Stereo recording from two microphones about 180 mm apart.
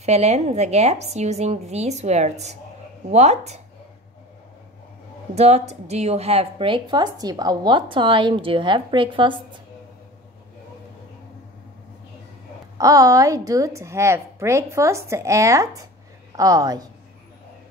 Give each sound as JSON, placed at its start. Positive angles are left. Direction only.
{"t": 0.0, "sound": "a woman's voice", "side_deg": -35}
{"t": 5.3, "sound": "a woman's voice", "side_deg": -35}
{"t": 12.7, "sound": "a woman's voice", "side_deg": -20}